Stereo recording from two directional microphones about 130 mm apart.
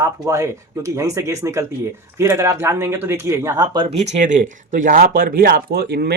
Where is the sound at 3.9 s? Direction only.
65° right (ahead or behind); by 5.4 s 90° right.